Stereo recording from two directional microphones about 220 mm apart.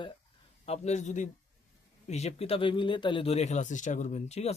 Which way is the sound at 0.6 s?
30° left (ahead or behind).